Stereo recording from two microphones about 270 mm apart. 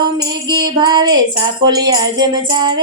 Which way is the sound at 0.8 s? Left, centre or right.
Centre.